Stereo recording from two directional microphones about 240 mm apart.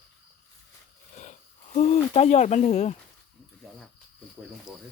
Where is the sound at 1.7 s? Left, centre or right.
Left.